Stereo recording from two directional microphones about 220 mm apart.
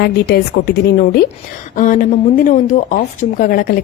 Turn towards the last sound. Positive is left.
turn(degrees=40)  # may be behind; listen again after turning